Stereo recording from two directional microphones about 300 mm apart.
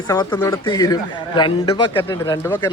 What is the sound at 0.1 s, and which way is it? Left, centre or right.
Speech, centre.